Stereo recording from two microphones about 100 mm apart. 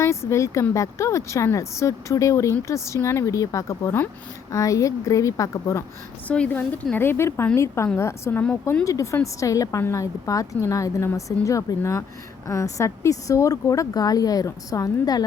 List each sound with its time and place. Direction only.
0.0 s speech: 30° left (ahead or behind)
6.2 s a woman's voice: 15° left (ahead or behind)
8.8 s speech: 35° left (ahead or behind)